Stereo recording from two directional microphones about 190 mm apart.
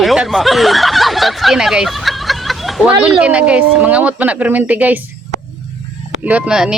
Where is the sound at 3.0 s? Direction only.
5° right (ahead or behind).